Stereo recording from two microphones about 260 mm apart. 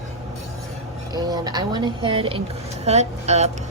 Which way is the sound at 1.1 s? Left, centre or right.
Centre.